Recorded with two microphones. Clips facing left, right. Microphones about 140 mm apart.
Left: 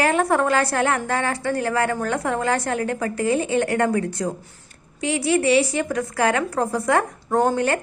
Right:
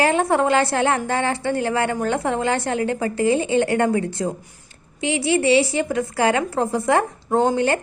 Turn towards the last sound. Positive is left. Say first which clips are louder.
# right 1 dB
turn(degrees=-25)  # may be behind; listen again after turning